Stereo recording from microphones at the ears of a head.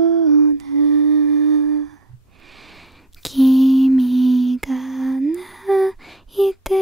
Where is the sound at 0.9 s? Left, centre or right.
Right.